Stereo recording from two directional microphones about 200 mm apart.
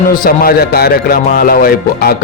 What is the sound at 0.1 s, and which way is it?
Speech, 45° left (ahead or behind).